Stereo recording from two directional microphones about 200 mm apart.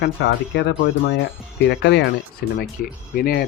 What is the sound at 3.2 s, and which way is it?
Speech, 50° left (ahead or behind).